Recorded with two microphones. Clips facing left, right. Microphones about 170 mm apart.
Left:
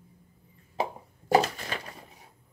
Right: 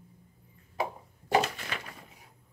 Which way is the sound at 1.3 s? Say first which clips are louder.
Left 4 dB; 35° left (ahead or behind).